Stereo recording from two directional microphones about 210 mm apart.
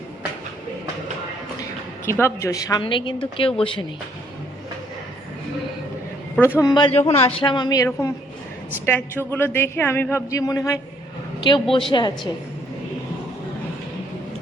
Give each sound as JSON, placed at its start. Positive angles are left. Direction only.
{"t": 2.0, "sound": "speech", "side_deg": 10}
{"t": 6.3, "sound": "speech", "side_deg": 10}
{"t": 8.9, "sound": "a man's voice", "side_deg": 10}